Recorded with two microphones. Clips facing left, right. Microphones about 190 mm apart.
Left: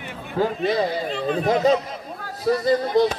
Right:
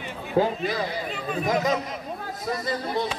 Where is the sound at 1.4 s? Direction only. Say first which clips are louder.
Left 5 dB; 30° left (ahead or behind).